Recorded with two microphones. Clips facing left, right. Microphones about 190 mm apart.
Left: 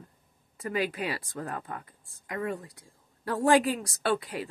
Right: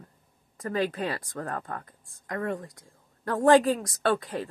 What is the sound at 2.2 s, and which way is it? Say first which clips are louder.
Speech: right 2 dB; 10° left (ahead or behind).